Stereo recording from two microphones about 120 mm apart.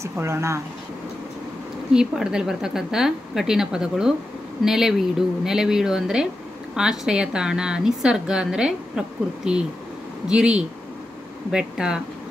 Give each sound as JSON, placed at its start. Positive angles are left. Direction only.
{"t": 0.0, "sound": "speech", "side_deg": -25}
{"t": 2.0, "sound": "a woman's voice", "side_deg": -5}